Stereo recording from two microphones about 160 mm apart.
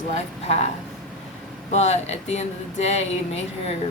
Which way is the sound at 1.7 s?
45° left (ahead or behind).